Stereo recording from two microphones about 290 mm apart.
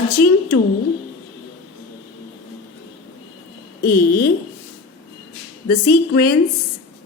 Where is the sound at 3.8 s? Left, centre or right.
Left.